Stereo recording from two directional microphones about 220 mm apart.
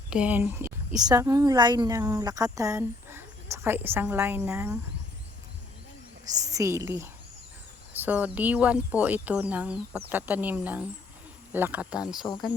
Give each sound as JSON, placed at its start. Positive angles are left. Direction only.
{"t": 0.1, "sound": "speech", "side_deg": -5}
{"t": 6.3, "sound": "speech", "side_deg": -15}
{"t": 12.2, "sound": "speech", "side_deg": 20}